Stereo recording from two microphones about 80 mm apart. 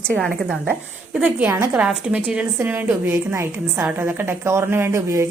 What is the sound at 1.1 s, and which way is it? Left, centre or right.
A woman's voice, centre.